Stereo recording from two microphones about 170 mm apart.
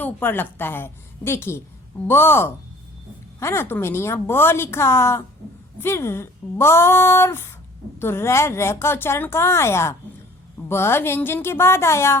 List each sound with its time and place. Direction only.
0.0 s speech: 10° left (ahead or behind)